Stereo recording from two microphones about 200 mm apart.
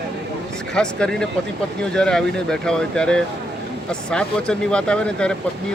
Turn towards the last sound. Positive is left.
turn(degrees=5)  # may be behind; listen again after turning